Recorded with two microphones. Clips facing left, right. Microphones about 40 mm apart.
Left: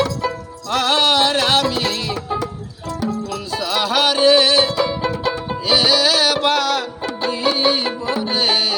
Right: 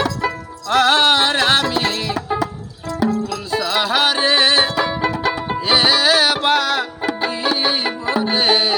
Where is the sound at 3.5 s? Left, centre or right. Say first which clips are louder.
Right 1 dB; centre.